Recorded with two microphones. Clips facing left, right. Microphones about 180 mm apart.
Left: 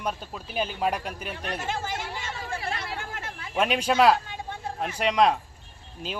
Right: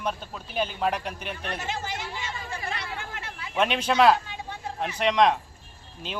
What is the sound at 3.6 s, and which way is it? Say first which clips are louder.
A man's voice: even; 5° left (ahead or behind).